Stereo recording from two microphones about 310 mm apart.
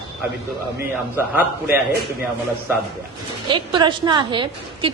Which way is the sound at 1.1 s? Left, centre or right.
Centre.